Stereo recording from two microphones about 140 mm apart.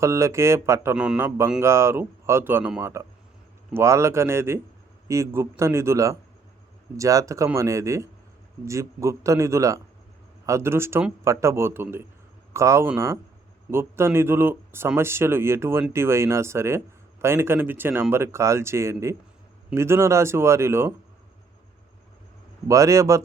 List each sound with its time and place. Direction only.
0.0 s speech: 20° right (ahead or behind)
0.9 s speech: 5° right (ahead or behind)
1.6 s speech: 20° right (ahead or behind)
22.7 s speech: 20° right (ahead or behind)